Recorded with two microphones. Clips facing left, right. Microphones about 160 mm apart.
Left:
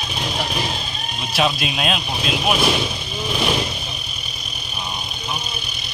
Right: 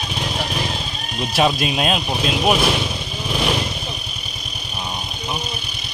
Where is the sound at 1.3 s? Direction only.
40° right (ahead or behind).